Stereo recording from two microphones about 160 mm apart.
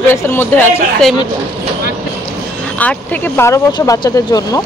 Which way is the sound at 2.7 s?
10° left (ahead or behind).